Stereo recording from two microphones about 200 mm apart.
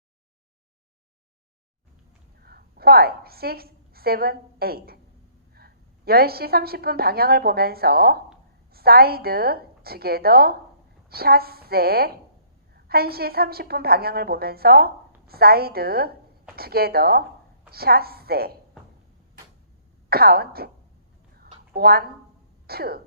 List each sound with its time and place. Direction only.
2.4 s a woman's voice: 50° right (ahead or behind)
20.1 s a woman's voice: 50° right (ahead or behind)
21.3 s a sound: 50° right (ahead or behind)
22.6 s speech: 50° right (ahead or behind)